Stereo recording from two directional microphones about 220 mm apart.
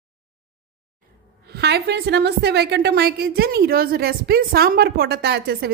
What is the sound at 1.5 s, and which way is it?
A woman's voice, 50° right (ahead or behind).